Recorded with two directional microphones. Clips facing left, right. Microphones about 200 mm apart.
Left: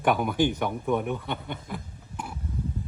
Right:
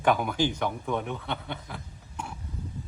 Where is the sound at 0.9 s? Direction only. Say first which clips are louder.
Left 4 dB; 15° left (ahead or behind).